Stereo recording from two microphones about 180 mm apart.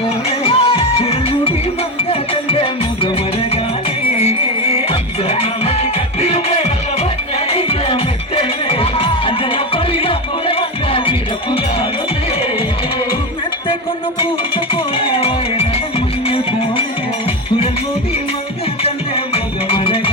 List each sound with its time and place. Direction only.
0.3 s music: 30° left (ahead or behind)
4.2 s music: 35° left (ahead or behind)
14.2 s music: 30° left (ahead or behind)
18.8 s music: 30° left (ahead or behind)